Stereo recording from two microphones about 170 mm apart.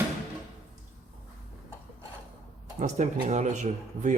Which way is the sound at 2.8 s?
45° right (ahead or behind).